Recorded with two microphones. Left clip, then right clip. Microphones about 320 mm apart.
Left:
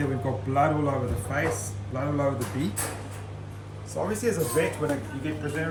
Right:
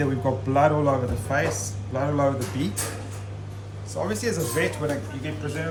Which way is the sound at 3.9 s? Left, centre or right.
Centre.